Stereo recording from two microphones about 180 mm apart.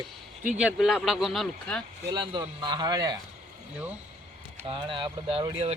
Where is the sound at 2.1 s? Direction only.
25° right (ahead or behind).